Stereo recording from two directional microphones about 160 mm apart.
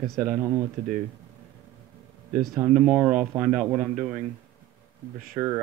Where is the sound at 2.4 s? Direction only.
Centre (ahead or behind).